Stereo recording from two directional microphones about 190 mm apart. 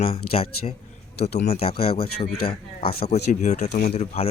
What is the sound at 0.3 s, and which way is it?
Speech, 30° left (ahead or behind).